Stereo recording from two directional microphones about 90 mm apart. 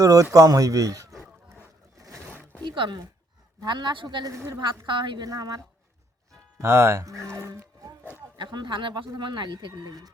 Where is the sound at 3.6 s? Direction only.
60° right (ahead or behind).